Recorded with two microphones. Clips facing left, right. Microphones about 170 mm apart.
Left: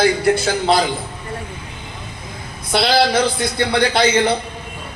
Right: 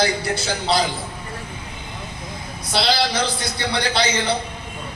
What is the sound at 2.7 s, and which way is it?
A man's voice, 50° left (ahead or behind).